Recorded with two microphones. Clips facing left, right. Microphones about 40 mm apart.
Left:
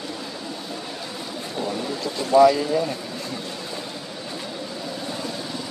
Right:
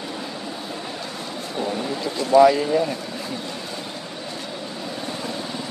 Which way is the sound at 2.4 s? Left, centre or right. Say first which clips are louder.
Right 1 dB; centre.